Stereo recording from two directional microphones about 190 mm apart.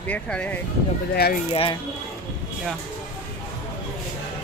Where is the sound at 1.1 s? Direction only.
55° left (ahead or behind).